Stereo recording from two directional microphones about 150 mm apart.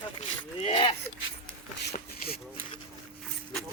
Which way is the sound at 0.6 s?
35° left (ahead or behind).